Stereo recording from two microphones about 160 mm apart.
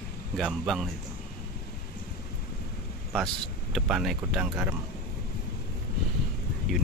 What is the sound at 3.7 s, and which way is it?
Speech, 5° right (ahead or behind).